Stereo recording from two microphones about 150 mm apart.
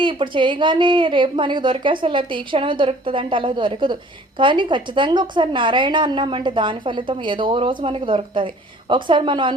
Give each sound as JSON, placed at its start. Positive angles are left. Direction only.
{"t": 0.0, "sound": "a woman's voice", "side_deg": -35}